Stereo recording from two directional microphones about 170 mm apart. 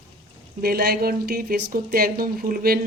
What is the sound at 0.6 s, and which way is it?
Speech, 65° right (ahead or behind).